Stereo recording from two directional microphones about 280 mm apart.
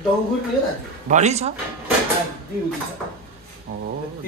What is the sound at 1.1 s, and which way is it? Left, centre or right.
Speech, right.